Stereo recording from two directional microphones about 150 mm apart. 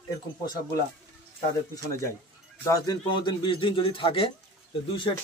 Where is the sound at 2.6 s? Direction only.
25° left (ahead or behind).